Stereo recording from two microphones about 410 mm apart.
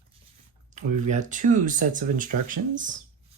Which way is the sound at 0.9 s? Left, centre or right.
Centre.